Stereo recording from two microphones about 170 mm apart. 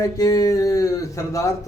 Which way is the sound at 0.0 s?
20° left (ahead or behind).